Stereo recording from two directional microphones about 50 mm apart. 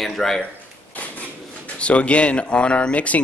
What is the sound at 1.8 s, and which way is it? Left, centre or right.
Speech, left.